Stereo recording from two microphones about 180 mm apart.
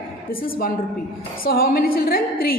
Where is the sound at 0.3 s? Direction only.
55° left (ahead or behind).